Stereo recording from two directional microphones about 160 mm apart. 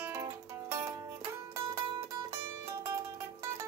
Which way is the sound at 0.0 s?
15° right (ahead or behind).